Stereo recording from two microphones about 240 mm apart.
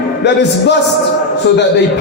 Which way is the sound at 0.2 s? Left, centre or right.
Left.